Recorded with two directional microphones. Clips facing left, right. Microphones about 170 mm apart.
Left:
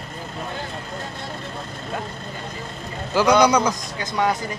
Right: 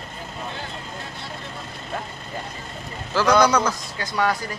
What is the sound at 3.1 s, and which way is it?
Speech, 15° left (ahead or behind).